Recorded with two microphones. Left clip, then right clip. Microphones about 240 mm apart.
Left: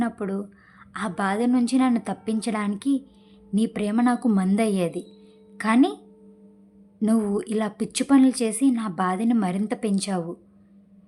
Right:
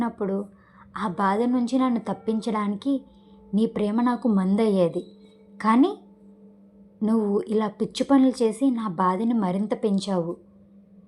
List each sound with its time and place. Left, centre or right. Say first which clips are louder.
0.0 s speech: right 1 dB; left
7.0 s speech: right 1 dB; left